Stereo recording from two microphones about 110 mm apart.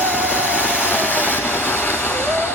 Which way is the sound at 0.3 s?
20° left (ahead or behind).